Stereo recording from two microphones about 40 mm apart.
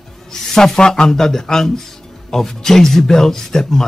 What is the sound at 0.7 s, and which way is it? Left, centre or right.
A man's voice, centre.